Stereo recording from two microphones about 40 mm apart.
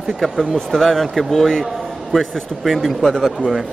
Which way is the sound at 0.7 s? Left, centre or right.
Centre.